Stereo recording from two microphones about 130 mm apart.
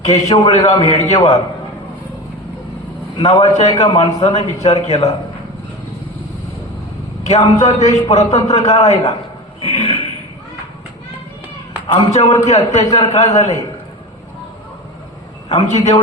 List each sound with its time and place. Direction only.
0.4 s a man's voice: 50° left (ahead or behind)
3.2 s a man's voice: 55° left (ahead or behind)
7.3 s a man's voice: 55° left (ahead or behind)
9.6 s a sound: 50° left (ahead or behind)
11.9 s a man's voice: 25° left (ahead or behind)
12.5 s a man's voice: 55° left (ahead or behind)
15.4 s a man's voice: 55° left (ahead or behind)